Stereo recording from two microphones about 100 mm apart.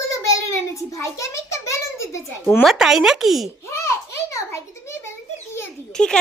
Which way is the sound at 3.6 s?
30° left (ahead or behind).